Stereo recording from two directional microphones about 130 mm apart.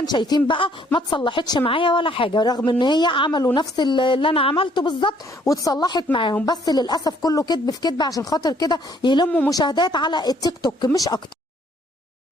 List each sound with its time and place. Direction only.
0.0 s a woman's voice: 35° left (ahead or behind)
5.4 s a woman's voice: 25° left (ahead or behind)